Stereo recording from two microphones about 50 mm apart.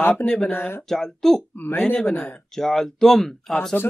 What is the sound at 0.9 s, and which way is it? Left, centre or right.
Speech, centre.